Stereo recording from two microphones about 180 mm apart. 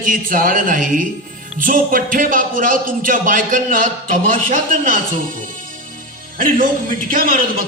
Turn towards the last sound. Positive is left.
turn(degrees=-50)  # may be behind; listen again after turning